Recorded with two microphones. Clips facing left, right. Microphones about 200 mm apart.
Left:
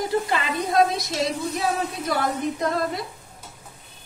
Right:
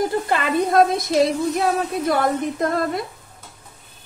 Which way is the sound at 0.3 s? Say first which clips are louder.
Right 5 dB; 55° right (ahead or behind).